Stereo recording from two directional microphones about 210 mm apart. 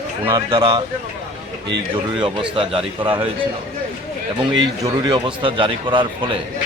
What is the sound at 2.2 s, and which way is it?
A man's voice, 25° right (ahead or behind).